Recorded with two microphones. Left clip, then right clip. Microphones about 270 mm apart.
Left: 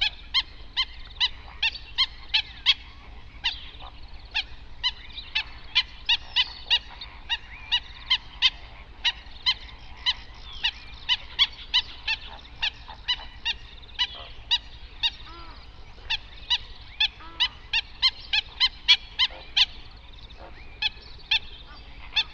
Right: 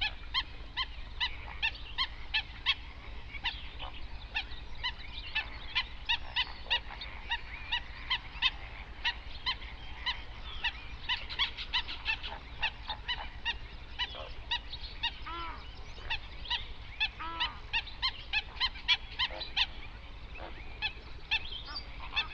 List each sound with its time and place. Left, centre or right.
0.0 s dog: left
3.4 s goose: left
7.2 s owl: left
10.1 s goose: left
10.6 s a sound: left
13.0 s goose: left
17.4 s a sound: left
20.8 s goose: left
22.2 s goose: left